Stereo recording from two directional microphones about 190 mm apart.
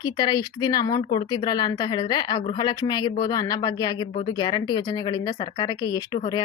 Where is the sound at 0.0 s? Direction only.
20° left (ahead or behind).